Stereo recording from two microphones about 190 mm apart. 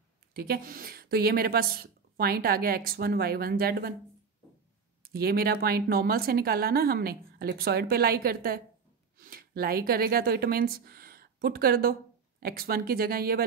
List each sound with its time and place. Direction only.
0.3 s a woman's voice: 55° right (ahead or behind)
5.1 s a woman's voice: 55° right (ahead or behind)